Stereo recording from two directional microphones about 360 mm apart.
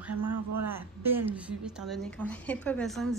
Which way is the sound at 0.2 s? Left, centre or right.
Right.